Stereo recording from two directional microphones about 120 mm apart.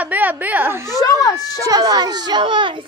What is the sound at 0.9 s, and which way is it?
Speech, 30° left (ahead or behind).